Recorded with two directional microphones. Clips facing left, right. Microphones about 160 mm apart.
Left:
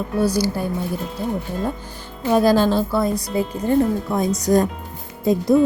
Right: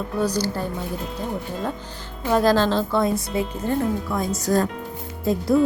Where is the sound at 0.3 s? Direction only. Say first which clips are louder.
Left 3 dB; 10° left (ahead or behind).